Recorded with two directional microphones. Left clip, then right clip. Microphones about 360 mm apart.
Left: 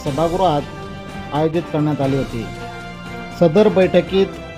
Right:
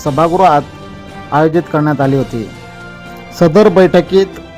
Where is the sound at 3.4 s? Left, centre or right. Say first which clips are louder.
Right 6 dB; centre.